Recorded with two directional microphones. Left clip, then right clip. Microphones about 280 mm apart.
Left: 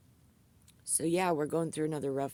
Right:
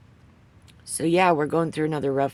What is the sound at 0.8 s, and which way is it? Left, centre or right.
Speech, left.